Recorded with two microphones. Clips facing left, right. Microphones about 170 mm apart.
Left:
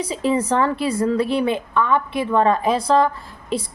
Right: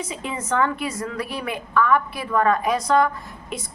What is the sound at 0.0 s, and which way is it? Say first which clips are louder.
A woman's voice: left 9 dB; 35° left (ahead or behind).